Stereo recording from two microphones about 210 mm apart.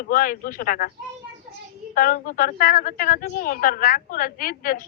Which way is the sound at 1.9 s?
40° left (ahead or behind).